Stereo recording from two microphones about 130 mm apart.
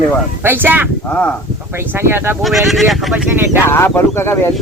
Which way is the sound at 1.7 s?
20° right (ahead or behind).